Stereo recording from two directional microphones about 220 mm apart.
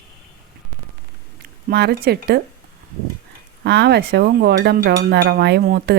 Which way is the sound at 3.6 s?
50° right (ahead or behind).